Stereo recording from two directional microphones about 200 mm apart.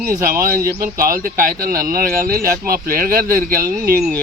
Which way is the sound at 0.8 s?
45° right (ahead or behind).